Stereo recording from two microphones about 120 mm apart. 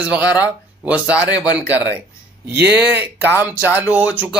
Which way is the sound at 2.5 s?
15° right (ahead or behind).